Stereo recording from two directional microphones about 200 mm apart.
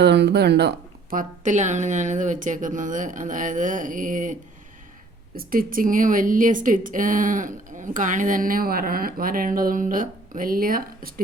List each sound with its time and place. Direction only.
0.0 s speech: 55° right (ahead or behind)
1.1 s speech: 40° right (ahead or behind)
5.4 s speech: 45° right (ahead or behind)